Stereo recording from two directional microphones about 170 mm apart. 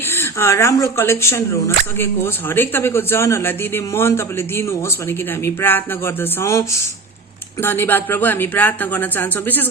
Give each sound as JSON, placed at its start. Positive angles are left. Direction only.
{"t": 0.1, "sound": "speech", "side_deg": 15}